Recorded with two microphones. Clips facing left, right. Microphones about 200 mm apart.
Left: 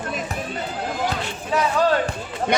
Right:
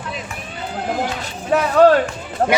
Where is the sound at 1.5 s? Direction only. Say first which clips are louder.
Right 7 dB; 60° right (ahead or behind).